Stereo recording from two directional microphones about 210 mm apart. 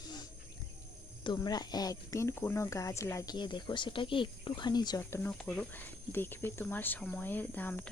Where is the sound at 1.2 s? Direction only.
20° left (ahead or behind).